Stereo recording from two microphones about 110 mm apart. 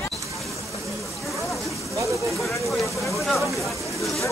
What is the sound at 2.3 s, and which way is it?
Speech, centre (ahead or behind).